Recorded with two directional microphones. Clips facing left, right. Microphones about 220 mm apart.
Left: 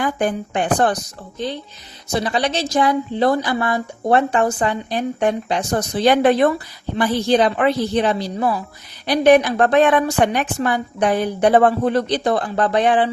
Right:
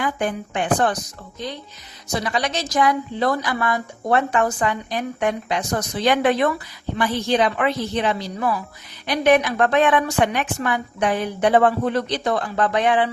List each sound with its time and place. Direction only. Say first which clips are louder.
0.0 s speech: left 3 dB; 35° left (ahead or behind)
2.1 s speech: left 4 dB; 30° left (ahead or behind)